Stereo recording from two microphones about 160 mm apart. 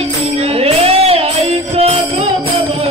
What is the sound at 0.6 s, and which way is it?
Music, 40° right (ahead or behind).